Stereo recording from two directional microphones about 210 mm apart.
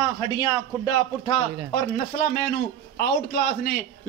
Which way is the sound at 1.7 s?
45° left (ahead or behind).